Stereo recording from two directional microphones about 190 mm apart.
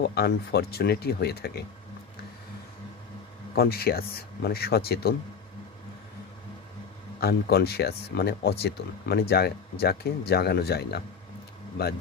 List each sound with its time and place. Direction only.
0.0 s speech: 60° left (ahead or behind)
3.5 s speech: 55° left (ahead or behind)
7.2 s speech: 55° left (ahead or behind)